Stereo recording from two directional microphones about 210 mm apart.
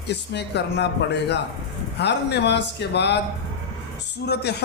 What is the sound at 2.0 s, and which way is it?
Speech, 55° left (ahead or behind).